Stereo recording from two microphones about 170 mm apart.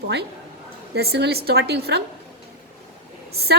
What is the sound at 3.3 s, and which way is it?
Speech, 70° right (ahead or behind).